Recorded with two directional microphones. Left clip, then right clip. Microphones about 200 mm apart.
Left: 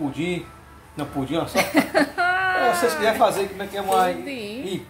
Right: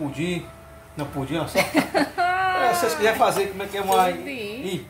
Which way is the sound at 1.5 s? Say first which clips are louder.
Left 1 dB; 10° left (ahead or behind).